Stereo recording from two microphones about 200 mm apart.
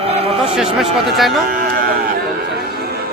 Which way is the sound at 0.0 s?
30° right (ahead or behind).